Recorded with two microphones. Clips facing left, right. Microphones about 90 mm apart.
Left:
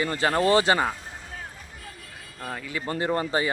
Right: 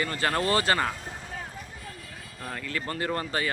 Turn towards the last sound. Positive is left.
turn(degrees=20)  # may be behind; listen again after turning